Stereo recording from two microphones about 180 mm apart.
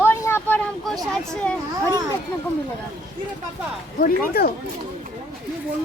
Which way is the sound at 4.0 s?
55° left (ahead or behind).